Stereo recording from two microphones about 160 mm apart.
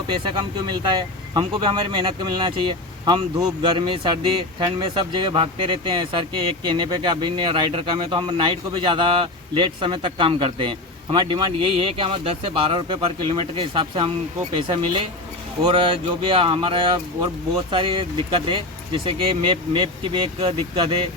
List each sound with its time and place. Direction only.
0.1 s speech: 30° right (ahead or behind)